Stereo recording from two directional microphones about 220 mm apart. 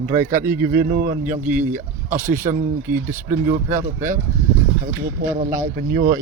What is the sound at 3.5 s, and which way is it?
Speech, 35° right (ahead or behind).